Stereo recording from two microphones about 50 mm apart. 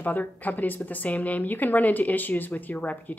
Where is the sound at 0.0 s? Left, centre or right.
Left.